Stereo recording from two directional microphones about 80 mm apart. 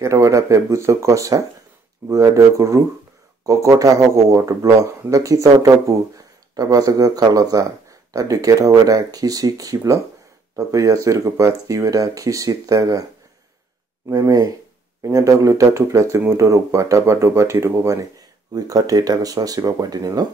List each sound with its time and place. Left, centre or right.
0.0 s speech: right
14.2 s speech: right
18.5 s speech: right